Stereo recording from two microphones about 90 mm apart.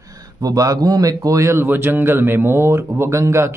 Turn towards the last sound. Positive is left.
turn(degrees=-30)  # may be behind; listen again after turning